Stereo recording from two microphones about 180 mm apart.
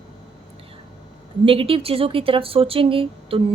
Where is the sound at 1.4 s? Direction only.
30° right (ahead or behind).